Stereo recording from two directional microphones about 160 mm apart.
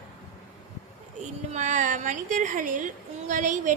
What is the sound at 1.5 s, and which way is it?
A woman's voice, 50° right (ahead or behind).